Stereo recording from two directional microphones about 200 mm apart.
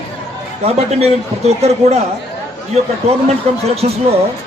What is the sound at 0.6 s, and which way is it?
A man's voice, 30° right (ahead or behind).